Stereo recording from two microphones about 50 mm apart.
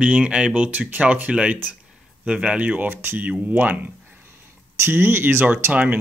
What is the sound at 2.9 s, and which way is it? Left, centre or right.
Speech, right.